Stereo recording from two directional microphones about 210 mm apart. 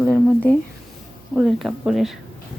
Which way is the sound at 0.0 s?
5° left (ahead or behind).